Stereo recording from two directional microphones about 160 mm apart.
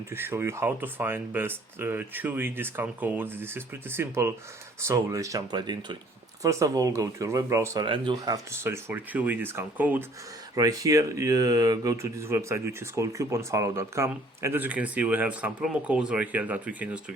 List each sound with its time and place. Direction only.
0.1 s speech: 15° right (ahead or behind)
10.5 s speech: 20° right (ahead or behind)